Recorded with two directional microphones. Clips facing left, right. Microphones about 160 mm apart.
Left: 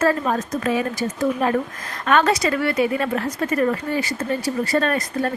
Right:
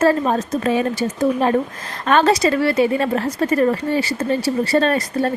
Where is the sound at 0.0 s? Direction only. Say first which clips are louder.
Right 4 dB; 30° right (ahead or behind).